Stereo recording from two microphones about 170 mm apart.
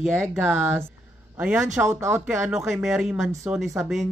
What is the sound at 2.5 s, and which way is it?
Speech, 5° right (ahead or behind).